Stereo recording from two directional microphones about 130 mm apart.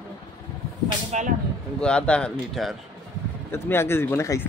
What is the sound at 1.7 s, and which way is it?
Speech, 5° left (ahead or behind).